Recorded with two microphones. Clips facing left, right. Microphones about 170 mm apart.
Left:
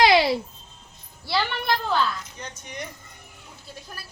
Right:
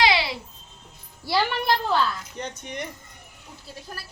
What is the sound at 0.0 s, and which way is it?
Babbling, 45° left (ahead or behind).